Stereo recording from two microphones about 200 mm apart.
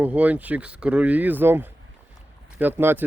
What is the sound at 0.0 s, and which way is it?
Speech, 10° right (ahead or behind).